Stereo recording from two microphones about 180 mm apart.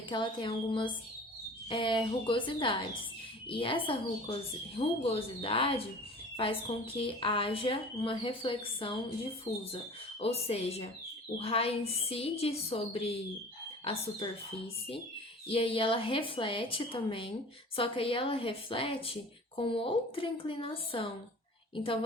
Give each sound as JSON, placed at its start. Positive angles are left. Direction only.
{"t": 0.1, "sound": "a woman's voice", "side_deg": 25}
{"t": 15.4, "sound": "a woman's voice", "side_deg": 30}